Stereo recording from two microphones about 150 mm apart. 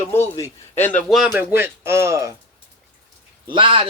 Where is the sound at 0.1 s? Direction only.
20° left (ahead or behind).